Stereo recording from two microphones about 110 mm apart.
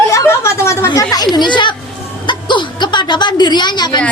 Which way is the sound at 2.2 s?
45° left (ahead or behind).